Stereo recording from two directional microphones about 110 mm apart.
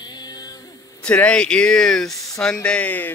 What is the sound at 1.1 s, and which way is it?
Speech, 10° left (ahead or behind).